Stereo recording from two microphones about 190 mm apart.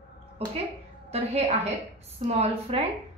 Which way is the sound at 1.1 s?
35° right (ahead or behind).